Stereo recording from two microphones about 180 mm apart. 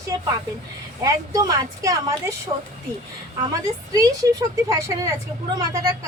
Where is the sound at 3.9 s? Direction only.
20° right (ahead or behind).